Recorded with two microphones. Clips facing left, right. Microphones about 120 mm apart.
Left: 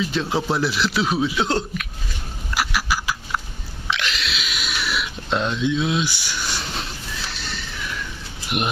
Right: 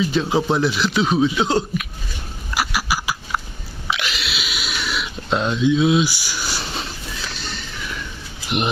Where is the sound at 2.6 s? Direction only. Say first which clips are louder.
Right 1 dB; 5° right (ahead or behind).